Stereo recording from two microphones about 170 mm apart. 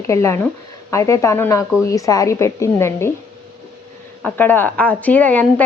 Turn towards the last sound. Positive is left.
turn(degrees=10)  # may be behind; listen again after turning